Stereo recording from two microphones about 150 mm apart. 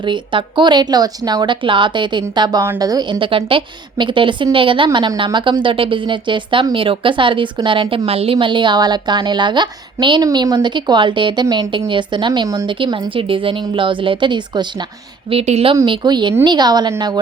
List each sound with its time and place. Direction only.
0.0 s a woman's voice: 30° right (ahead or behind)
15.3 s a woman's voice: 45° right (ahead or behind)
15.7 s speech: 25° right (ahead or behind)